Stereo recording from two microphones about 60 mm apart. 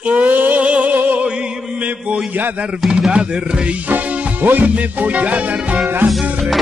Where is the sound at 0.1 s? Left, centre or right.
Right.